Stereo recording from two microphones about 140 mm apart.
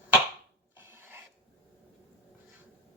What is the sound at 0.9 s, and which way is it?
Filing, 15° right (ahead or behind).